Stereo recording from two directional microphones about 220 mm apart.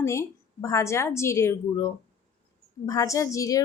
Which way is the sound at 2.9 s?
15° left (ahead or behind).